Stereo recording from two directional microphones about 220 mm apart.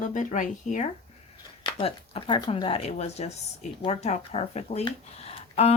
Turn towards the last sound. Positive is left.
turn(degrees=30)  # may be behind; listen again after turning